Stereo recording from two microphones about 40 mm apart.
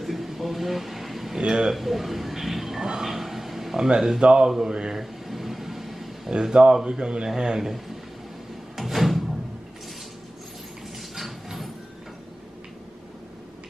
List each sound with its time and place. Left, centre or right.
0.0 s a sound: centre
1.4 s a man's voice: centre
1.7 s a sound: centre
4.2 s a man's voice: right
4.5 s mantra: centre
5.3 s vehicle: centre
6.3 s a man's voice: right
7.2 s mantra: centre
8.7 s drawer open or close: centre
11.1 s a sound: centre